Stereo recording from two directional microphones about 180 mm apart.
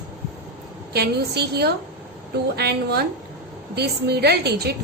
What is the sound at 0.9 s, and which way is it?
A woman's voice, 65° right (ahead or behind).